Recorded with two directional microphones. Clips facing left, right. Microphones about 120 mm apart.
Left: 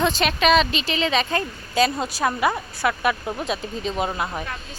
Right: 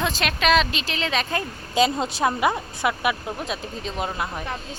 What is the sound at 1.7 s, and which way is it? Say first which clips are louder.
A woman's voice: even; 20° right (ahead or behind).